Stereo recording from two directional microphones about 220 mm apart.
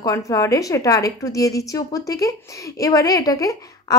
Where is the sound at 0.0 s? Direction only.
15° left (ahead or behind).